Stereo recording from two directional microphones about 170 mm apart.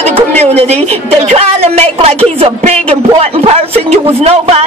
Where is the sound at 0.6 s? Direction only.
35° right (ahead or behind).